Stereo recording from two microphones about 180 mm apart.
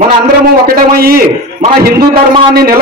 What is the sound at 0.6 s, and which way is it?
Speech, 55° right (ahead or behind).